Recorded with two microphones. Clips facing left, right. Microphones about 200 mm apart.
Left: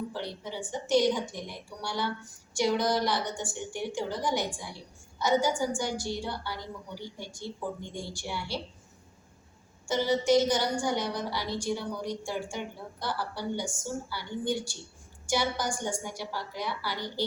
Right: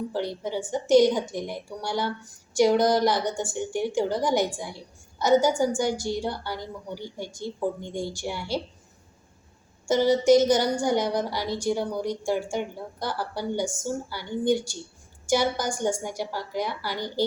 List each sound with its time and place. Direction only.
0.1 s a woman's voice: 40° right (ahead or behind)
9.8 s a woman's voice: 40° right (ahead or behind)